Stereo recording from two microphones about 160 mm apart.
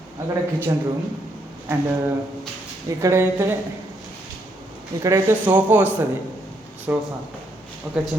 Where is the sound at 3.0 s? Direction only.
20° right (ahead or behind).